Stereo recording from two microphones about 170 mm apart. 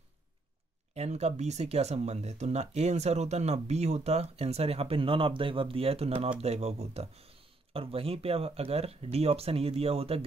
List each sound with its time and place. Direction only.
0.9 s speech: 40° right (ahead or behind)